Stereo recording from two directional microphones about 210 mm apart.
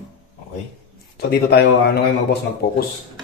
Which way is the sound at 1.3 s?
50° left (ahead or behind).